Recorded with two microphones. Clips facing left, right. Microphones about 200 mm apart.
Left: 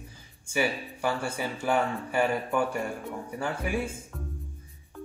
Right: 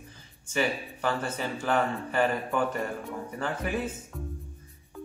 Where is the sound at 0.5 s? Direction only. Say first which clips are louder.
Even; 10° left (ahead or behind).